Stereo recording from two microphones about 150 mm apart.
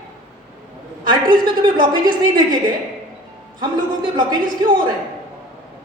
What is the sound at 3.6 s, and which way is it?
A man's voice, 30° right (ahead or behind).